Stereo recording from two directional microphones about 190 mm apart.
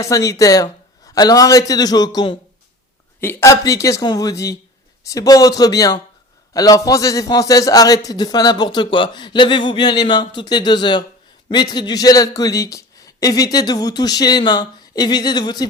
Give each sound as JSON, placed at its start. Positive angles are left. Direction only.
{"t": 0.0, "sound": "a man's voice", "side_deg": 15}